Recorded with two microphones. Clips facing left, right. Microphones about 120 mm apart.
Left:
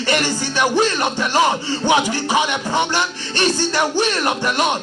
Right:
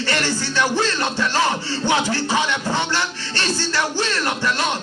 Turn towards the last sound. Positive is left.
turn(degrees=20)  # may be behind; listen again after turning